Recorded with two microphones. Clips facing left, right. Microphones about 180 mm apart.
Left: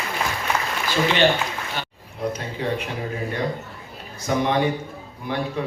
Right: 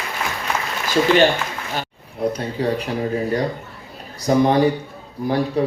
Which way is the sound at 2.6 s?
35° right (ahead or behind).